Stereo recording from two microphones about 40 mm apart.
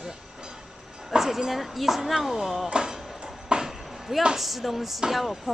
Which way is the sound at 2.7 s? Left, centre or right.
Centre.